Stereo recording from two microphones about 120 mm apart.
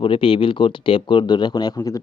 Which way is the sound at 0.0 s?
50° left (ahead or behind).